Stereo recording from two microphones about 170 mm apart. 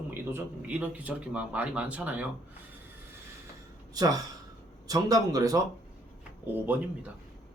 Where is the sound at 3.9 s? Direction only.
20° right (ahead or behind).